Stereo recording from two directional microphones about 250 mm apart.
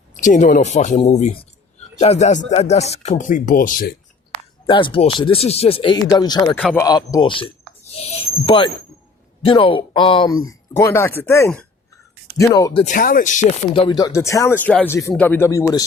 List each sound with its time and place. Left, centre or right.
0.2 s speech: left
4.6 s speech: centre
6.6 s a man's voice: centre
6.8 s speech: centre
12.8 s speech: left
13.7 s speech: centre